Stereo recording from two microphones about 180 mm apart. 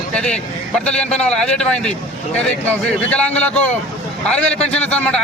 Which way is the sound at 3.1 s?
5° left (ahead or behind).